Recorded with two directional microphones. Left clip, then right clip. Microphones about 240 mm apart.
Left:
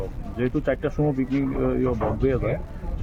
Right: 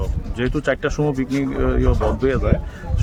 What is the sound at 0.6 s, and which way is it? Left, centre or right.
Speech, centre.